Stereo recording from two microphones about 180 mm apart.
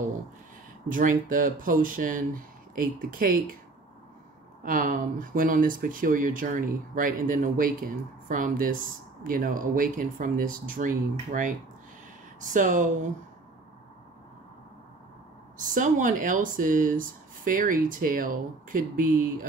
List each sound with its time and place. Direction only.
0.8 s speech: 50° right (ahead or behind)
4.6 s speech: 50° right (ahead or behind)
15.5 s speech: 45° right (ahead or behind)